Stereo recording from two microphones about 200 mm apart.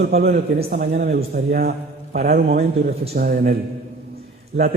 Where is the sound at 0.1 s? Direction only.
50° right (ahead or behind).